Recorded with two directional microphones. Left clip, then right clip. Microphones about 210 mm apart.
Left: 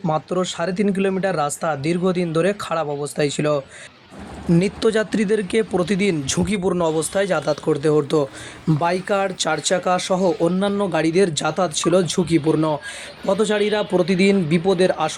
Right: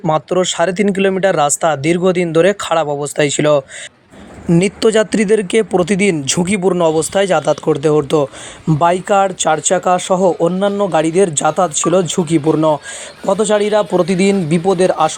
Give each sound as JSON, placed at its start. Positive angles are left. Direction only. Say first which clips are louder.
{"t": 0.0, "sound": "speech", "louder": "right 7 dB", "side_deg": -30}